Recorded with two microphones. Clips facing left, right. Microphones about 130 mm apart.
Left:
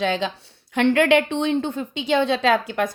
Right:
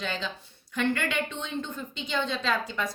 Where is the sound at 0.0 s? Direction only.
80° left.